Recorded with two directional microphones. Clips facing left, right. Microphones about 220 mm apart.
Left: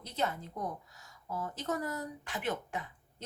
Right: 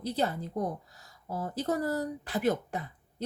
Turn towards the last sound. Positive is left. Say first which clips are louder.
# right 5 dB
turn(degrees=-35)  # may be behind; listen again after turning